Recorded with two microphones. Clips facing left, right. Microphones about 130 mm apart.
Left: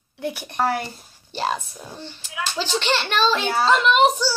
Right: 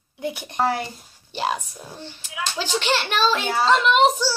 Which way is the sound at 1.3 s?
10° right (ahead or behind).